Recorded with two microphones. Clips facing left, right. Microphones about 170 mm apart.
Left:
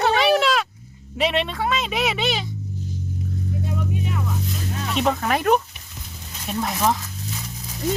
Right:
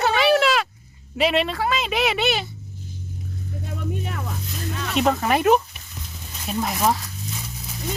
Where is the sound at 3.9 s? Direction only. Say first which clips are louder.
Left 3 dB; 50° right (ahead or behind).